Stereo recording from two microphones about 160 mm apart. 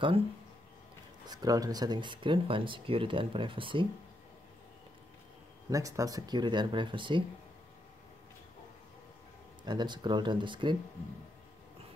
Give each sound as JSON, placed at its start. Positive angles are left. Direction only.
{"t": 1.2, "sound": "speech", "side_deg": -25}
{"t": 5.7, "sound": "speech", "side_deg": -20}
{"t": 9.7, "sound": "speech", "side_deg": -30}